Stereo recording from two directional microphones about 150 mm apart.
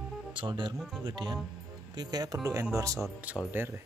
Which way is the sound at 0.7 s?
5° right (ahead or behind).